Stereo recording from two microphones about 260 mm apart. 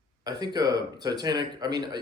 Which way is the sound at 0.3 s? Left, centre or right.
Centre.